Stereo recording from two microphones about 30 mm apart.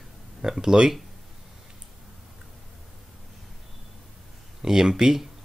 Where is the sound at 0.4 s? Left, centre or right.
Right.